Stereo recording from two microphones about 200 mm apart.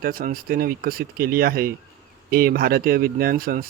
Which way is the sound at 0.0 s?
45° right (ahead or behind).